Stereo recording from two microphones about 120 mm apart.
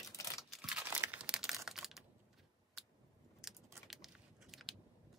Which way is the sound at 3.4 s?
Centre (ahead or behind).